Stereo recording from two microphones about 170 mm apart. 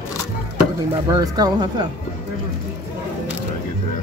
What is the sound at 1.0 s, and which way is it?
Speech, 20° right (ahead or behind).